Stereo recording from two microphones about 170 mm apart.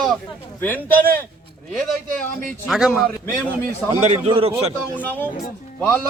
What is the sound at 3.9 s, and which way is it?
Speech, 40° right (ahead or behind).